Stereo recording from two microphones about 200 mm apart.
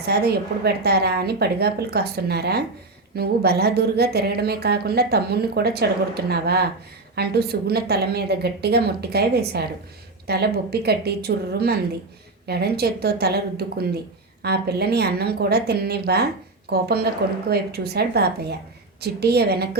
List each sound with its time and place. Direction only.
0.1 s a woman's voice: 50° right (ahead or behind)